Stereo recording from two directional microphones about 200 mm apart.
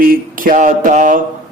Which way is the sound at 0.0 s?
45° right (ahead or behind).